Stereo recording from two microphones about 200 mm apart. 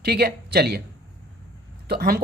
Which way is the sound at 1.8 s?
50° right (ahead or behind).